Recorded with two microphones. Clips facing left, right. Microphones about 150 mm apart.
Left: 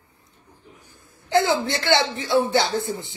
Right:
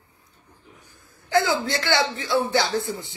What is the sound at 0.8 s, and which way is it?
A man's voice, 25° left (ahead or behind).